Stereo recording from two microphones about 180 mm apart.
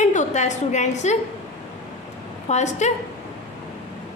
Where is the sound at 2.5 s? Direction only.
40° left (ahead or behind).